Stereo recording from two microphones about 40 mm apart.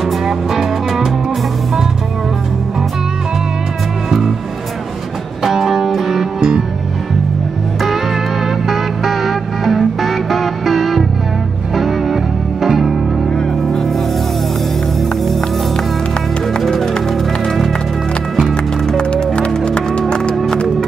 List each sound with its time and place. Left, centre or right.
5.4 s music: centre
8.6 s music: centre
16.5 s music: centre
18.9 s music: left